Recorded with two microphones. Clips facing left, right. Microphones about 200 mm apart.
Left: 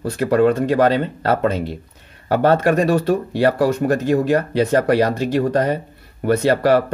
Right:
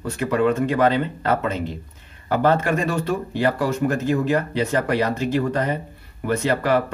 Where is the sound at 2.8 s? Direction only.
35° left (ahead or behind).